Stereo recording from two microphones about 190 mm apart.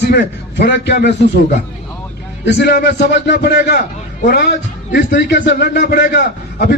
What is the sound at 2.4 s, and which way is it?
A man's voice, 65° left (ahead or behind).